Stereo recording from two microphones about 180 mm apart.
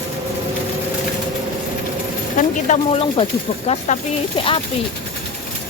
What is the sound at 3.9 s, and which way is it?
Speech, 40° left (ahead or behind).